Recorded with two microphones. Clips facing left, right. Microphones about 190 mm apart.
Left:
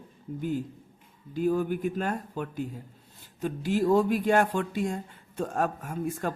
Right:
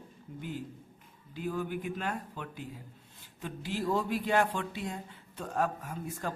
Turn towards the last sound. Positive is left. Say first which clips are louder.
# left 6 dB
turn(degrees=55)  # may be behind; listen again after turning